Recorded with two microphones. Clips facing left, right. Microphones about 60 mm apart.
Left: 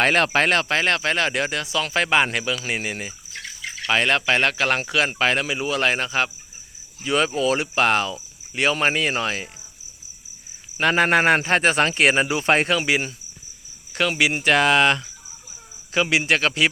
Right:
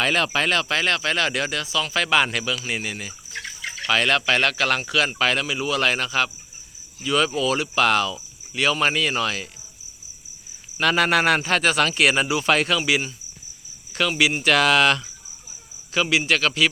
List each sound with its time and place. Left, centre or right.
0.0 s speech: left
1.6 s speech: left
1.9 s speech: left
10.8 s speech: left